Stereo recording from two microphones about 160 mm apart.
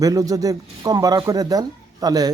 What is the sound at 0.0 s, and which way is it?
Speech, 20° right (ahead or behind).